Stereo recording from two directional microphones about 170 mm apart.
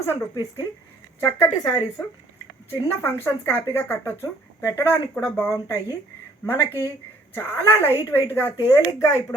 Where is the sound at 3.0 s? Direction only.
10° left (ahead or behind).